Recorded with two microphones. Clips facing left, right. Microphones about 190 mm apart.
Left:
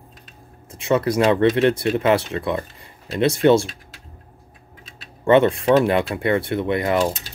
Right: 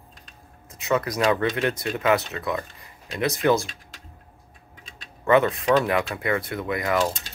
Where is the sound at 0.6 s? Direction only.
30° left (ahead or behind).